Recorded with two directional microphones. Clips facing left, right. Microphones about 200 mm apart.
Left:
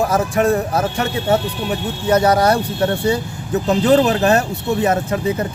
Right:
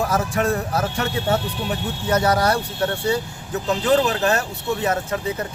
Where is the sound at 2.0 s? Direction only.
20° left (ahead or behind).